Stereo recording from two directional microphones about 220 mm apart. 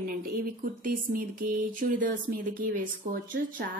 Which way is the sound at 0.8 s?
40° right (ahead or behind).